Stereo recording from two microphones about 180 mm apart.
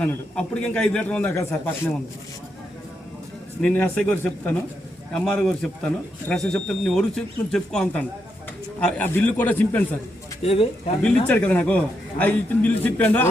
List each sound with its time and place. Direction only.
0.0 s a man's voice: 5° left (ahead or behind)
3.6 s a man's voice: 5° left (ahead or behind)
10.4 s speech: 35° left (ahead or behind)
11.0 s a man's voice: 5° left (ahead or behind)